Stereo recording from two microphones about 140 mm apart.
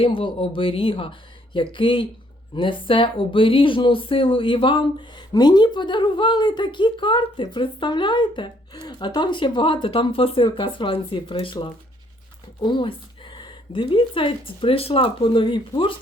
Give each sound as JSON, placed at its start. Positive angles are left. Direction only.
{"t": 0.0, "sound": "speech", "side_deg": 40}